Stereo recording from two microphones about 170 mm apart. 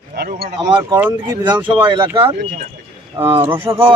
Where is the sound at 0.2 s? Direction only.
65° right (ahead or behind).